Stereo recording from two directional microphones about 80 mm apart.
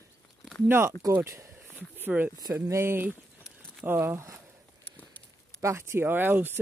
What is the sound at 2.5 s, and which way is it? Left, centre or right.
Speech, right.